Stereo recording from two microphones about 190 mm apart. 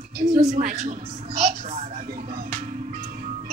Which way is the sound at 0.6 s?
40° right (ahead or behind).